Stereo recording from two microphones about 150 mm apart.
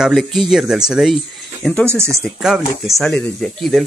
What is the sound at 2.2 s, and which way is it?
Speech, centre (ahead or behind).